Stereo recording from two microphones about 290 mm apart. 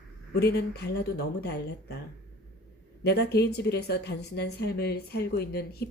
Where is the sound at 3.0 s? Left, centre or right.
Left.